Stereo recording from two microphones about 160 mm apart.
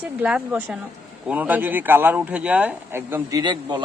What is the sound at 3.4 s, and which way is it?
Speech, 30° right (ahead or behind).